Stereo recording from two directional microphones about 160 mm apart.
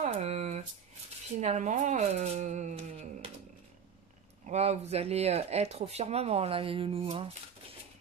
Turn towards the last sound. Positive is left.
turn(degrees=-35)  # may be behind; listen again after turning